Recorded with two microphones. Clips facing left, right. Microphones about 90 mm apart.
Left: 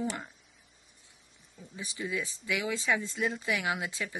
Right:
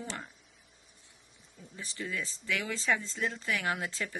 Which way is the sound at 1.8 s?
15° left (ahead or behind).